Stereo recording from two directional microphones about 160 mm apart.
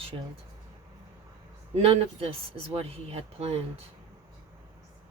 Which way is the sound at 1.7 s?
35° right (ahead or behind).